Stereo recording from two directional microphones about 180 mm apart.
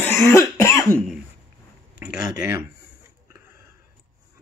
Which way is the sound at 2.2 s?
50° left (ahead or behind).